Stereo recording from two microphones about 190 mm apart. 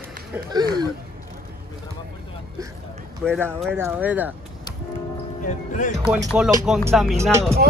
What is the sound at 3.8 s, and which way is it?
Speech, 10° right (ahead or behind).